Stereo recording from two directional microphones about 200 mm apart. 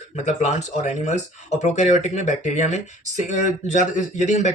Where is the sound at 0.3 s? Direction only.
35° left (ahead or behind).